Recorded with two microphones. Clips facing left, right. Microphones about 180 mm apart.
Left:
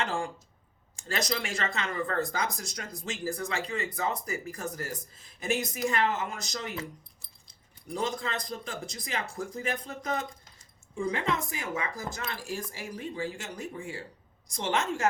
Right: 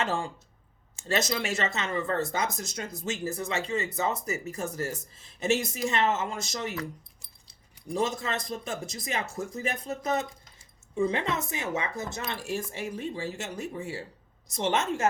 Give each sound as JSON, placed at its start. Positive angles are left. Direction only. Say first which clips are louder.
{"t": 0.9, "sound": "speech", "louder": "right 3 dB", "side_deg": -25}
{"t": 7.9, "sound": "speech", "louder": "right 3 dB", "side_deg": -25}